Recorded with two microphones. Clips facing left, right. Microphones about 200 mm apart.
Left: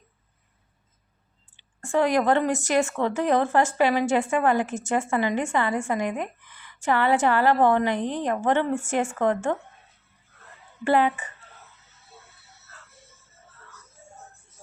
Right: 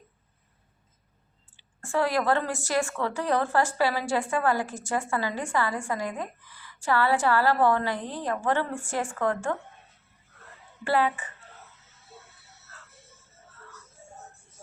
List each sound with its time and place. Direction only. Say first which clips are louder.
1.5 s a woman's voice: left 4 dB; 20° left (ahead or behind)
10.8 s a woman's voice: left 4 dB; 20° left (ahead or behind)